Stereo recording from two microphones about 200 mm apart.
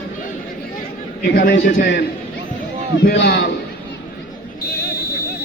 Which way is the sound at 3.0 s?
55° left (ahead or behind).